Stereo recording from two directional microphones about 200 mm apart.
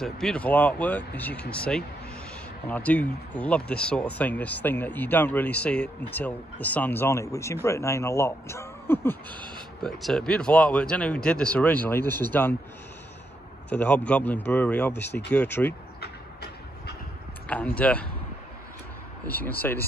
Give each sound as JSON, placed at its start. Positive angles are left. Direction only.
{"t": 0.0, "sound": "speech", "side_deg": 5}
{"t": 13.7, "sound": "speech", "side_deg": 10}
{"t": 16.0, "sound": "train", "side_deg": 55}
{"t": 17.7, "sound": "speech", "side_deg": 5}
{"t": 19.2, "sound": "speech", "side_deg": 10}